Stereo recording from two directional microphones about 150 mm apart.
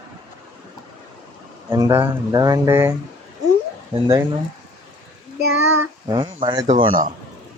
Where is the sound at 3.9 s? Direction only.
25° right (ahead or behind).